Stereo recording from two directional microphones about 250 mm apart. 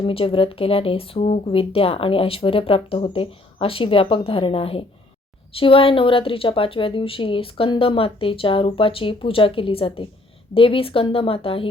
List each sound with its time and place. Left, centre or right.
0.0 s speech: left